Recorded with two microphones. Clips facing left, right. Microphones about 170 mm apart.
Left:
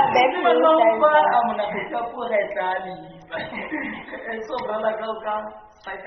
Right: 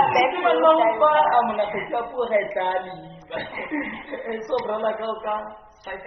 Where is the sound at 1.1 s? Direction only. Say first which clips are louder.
Left 1 dB; 15° right (ahead or behind).